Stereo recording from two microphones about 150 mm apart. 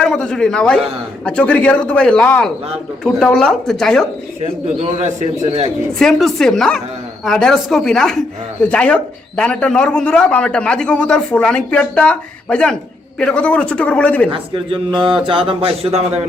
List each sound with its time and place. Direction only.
0.0 s speech: 5° left (ahead or behind)
6.0 s speech: centre (ahead or behind)
14.3 s speech: 35° right (ahead or behind)